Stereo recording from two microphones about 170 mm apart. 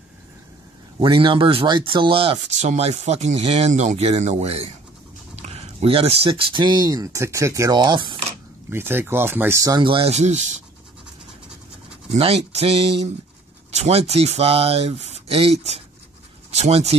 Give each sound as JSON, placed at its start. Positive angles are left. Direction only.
{"t": 0.9, "sound": "speech", "side_deg": -30}
{"t": 8.6, "sound": "speech", "side_deg": -15}
{"t": 12.2, "sound": "speech", "side_deg": -35}